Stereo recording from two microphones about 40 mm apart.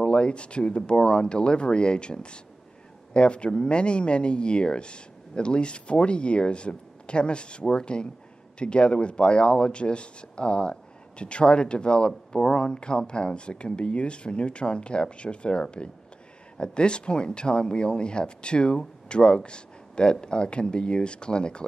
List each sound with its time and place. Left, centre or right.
0.0 s speech: left